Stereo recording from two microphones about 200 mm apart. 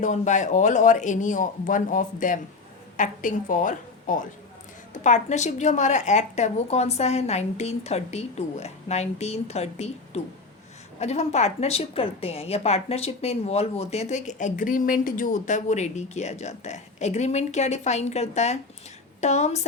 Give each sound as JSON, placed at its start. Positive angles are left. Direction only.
{"t": 0.0, "sound": "a woman's voice", "side_deg": 40}